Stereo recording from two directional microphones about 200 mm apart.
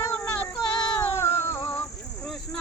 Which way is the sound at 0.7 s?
20° left (ahead or behind).